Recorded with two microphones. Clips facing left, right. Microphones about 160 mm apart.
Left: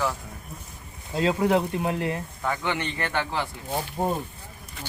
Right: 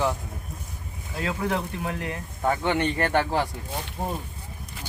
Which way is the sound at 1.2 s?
25° left (ahead or behind).